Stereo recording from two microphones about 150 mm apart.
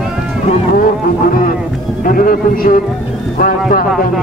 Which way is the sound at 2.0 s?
70° left (ahead or behind).